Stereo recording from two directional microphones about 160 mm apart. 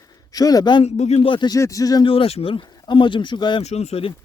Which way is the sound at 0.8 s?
45° left (ahead or behind).